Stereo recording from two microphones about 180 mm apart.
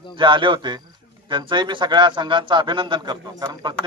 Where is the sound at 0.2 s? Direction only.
25° right (ahead or behind).